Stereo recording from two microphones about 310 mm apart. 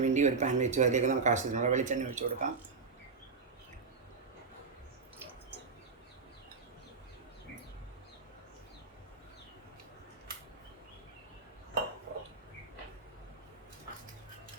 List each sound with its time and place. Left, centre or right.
0.0 s speech: right